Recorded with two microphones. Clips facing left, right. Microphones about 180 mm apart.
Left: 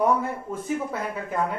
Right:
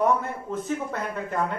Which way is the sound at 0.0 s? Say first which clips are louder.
Left 1 dB; 10° left (ahead or behind).